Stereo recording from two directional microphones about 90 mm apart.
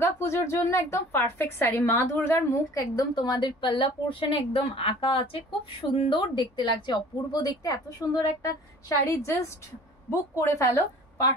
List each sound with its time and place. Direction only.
0.0 s a woman's voice: 30° left (ahead or behind)
2.7 s a woman's voice: 45° left (ahead or behind); by 5.4 s 90° left
5.9 s a woman's voice: 65° left (ahead or behind); by 10.8 s 35° left (ahead or behind)